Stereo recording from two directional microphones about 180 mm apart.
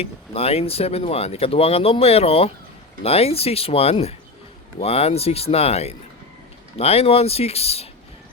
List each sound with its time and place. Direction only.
0.0 s speech: 35° left (ahead or behind)